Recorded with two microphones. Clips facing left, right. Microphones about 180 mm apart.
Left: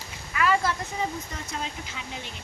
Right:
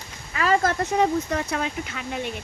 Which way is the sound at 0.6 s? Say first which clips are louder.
Right 5 dB; 55° right (ahead or behind).